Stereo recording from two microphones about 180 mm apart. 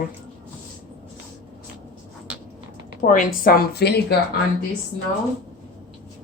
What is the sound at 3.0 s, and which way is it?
Speech, 45° left (ahead or behind).